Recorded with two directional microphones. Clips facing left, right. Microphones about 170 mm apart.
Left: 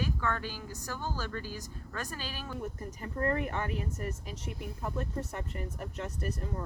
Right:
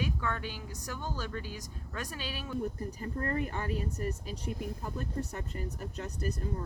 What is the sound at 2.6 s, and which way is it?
Speech, 35° right (ahead or behind).